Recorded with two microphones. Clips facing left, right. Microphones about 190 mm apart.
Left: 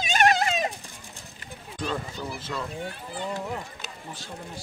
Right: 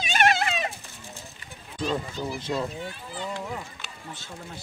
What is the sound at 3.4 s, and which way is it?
Speech, 40° left (ahead or behind).